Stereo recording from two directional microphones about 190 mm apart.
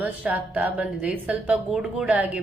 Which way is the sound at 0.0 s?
5° right (ahead or behind).